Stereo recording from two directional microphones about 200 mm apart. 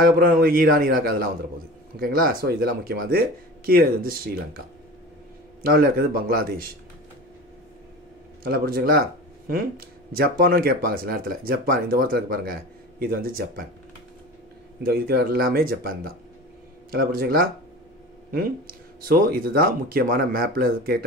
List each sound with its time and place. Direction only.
0.0 s speech: 45° right (ahead or behind)
5.6 s speech: 50° right (ahead or behind)
8.5 s speech: 50° right (ahead or behind)
10.1 s speech: 50° right (ahead or behind)
14.9 s speech: 50° right (ahead or behind)